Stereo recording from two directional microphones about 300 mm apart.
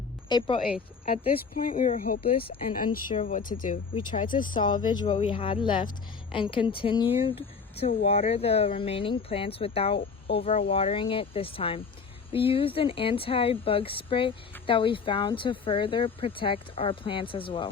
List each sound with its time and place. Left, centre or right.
0.3 s speech: centre
2.5 s speech: left
4.6 s speech: centre